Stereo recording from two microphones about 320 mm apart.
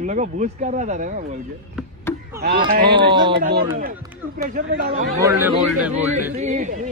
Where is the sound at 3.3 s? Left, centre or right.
Right.